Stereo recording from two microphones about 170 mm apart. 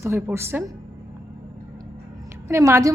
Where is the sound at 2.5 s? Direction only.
15° right (ahead or behind).